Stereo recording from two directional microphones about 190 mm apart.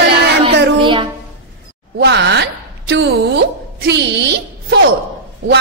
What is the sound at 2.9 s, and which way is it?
Music, 65° right (ahead or behind).